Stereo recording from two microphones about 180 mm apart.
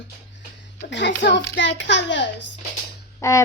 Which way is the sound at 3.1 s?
15° left (ahead or behind).